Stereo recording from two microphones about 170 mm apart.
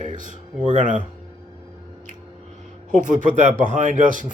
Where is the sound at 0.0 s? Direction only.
50° right (ahead or behind).